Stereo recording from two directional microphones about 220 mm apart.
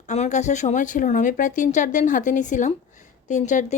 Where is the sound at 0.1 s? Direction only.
30° left (ahead or behind).